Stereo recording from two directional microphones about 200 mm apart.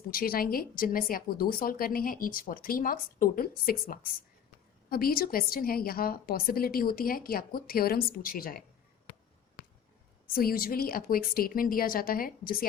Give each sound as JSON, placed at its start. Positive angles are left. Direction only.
{"t": 0.1, "sound": "speech", "side_deg": 45}
{"t": 10.3, "sound": "speech", "side_deg": 45}